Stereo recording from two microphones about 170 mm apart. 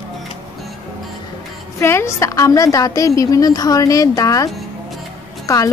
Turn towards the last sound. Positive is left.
turn(degrees=20)  # may be behind; listen again after turning